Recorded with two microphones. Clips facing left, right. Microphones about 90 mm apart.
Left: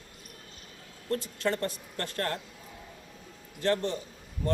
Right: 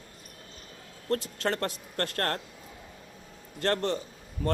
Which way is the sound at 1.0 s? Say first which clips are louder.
Right 1 dB; 65° right (ahead or behind).